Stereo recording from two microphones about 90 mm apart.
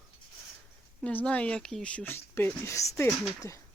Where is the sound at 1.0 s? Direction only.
15° left (ahead or behind).